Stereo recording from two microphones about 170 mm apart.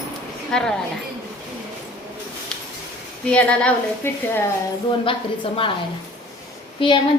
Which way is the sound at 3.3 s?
5° left (ahead or behind).